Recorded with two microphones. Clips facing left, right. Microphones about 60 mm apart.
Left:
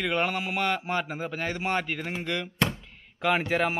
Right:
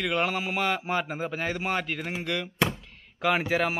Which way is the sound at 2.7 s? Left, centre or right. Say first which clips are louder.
Even; centre.